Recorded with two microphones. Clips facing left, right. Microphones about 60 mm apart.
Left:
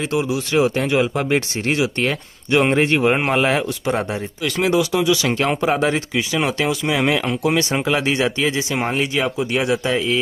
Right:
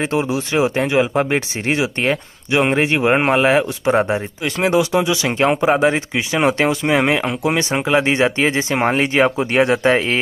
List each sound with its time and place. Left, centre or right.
0.0 s speech: right
2.6 s speech: centre; by 10.2 s right